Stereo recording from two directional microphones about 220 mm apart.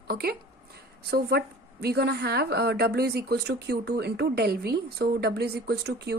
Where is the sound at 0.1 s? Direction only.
45° right (ahead or behind).